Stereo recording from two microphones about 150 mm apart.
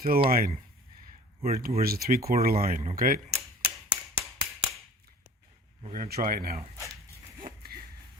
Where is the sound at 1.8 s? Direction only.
85° right.